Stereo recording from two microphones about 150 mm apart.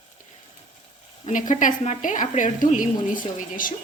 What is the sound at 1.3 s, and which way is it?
A woman's voice, 60° left (ahead or behind).